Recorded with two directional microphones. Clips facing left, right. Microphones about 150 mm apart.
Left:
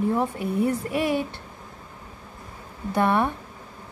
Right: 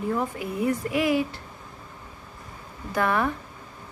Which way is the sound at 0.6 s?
30° left (ahead or behind).